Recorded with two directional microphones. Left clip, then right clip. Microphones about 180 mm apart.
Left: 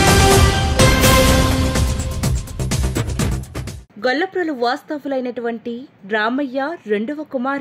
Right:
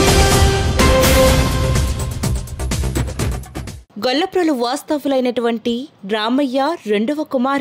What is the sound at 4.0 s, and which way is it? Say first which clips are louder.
A woman's voice: right 2 dB; 35° right (ahead or behind).